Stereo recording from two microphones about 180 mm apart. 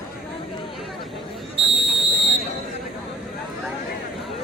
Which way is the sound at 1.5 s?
35° right (ahead or behind).